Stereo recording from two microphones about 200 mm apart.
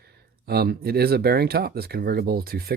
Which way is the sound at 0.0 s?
50° right (ahead or behind).